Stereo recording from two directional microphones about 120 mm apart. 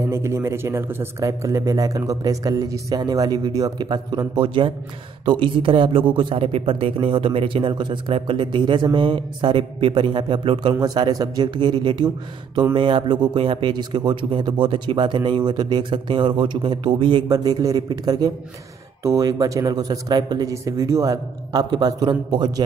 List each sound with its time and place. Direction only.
0.1 s a man's voice: 25° right (ahead or behind); by 17.2 s 45° right (ahead or behind)
17.3 s a man's voice: 35° right (ahead or behind)